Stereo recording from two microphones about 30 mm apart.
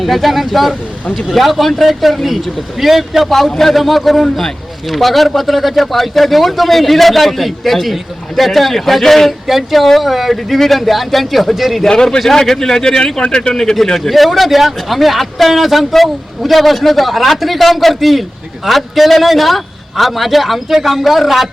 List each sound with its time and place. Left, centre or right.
0.0 s speech: centre
11.9 s speech: left
14.1 s speech: centre